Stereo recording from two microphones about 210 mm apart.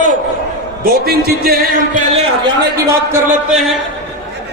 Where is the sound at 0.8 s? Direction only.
45° right (ahead or behind).